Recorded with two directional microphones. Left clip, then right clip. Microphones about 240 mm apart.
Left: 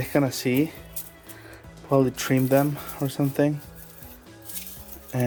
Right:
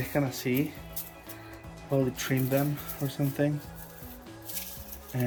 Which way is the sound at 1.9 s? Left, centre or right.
Left.